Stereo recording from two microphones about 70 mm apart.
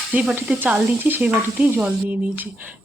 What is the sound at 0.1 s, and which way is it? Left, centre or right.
Speech, right.